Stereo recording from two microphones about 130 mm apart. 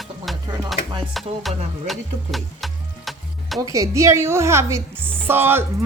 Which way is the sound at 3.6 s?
25° right (ahead or behind).